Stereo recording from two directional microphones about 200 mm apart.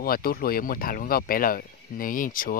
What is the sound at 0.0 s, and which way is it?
Speech, 50° left (ahead or behind).